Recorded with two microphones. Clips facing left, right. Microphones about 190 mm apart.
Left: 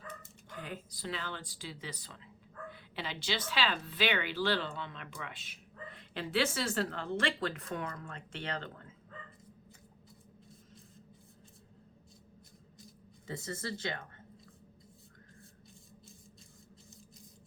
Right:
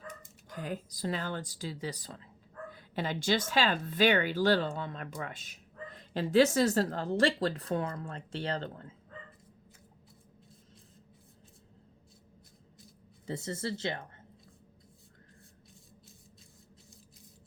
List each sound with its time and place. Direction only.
0.5 s speech: 40° right (ahead or behind)
13.2 s speech: 25° right (ahead or behind)